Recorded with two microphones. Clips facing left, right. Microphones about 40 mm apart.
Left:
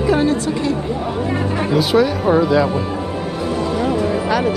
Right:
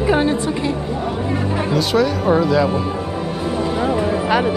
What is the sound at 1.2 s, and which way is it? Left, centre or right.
Speech, centre.